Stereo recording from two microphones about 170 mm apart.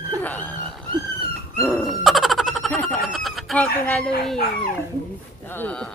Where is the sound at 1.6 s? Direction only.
5° left (ahead or behind).